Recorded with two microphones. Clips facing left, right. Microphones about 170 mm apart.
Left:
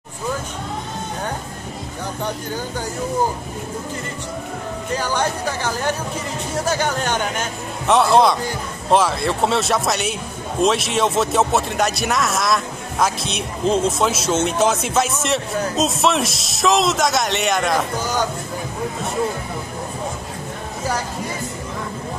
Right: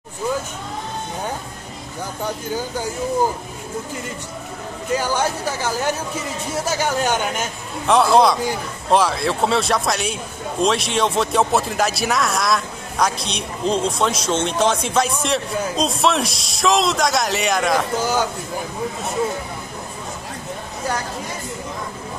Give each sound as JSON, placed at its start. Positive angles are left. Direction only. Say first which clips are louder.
{"t": 4.9, "sound": "speech", "louder": "right 1 dB", "side_deg": -10}
{"t": 6.8, "sound": "speech", "louder": "right 1 dB", "side_deg": -10}